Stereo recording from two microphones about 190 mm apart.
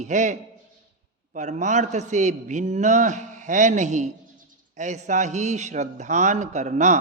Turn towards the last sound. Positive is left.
turn(degrees=-40)  # may be behind; listen again after turning